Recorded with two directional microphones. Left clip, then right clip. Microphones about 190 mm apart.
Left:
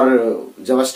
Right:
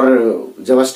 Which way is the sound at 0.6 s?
15° left (ahead or behind).